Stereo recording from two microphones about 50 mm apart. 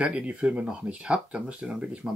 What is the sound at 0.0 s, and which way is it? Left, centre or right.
Speech, right.